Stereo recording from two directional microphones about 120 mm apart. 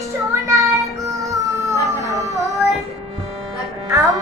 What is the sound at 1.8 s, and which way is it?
Howl, 30° right (ahead or behind).